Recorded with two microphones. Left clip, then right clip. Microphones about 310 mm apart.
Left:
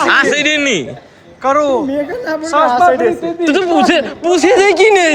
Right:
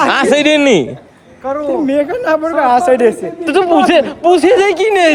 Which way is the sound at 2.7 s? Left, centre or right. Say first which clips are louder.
Right 3 dB; right.